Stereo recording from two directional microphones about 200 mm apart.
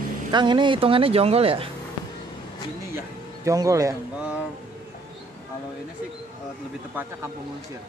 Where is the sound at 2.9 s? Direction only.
15° right (ahead or behind).